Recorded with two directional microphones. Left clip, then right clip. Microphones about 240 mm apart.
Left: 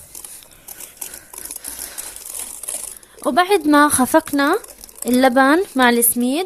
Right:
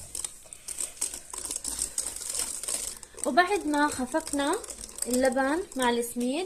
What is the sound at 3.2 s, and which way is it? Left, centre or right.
Speech, left.